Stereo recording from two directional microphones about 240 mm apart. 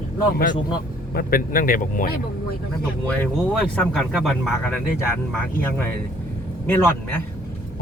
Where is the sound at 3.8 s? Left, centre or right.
Centre.